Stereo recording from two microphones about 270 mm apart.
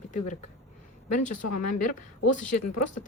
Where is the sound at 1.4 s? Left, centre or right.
Left.